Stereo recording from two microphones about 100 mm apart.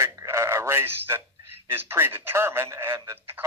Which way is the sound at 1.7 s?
25° right (ahead or behind).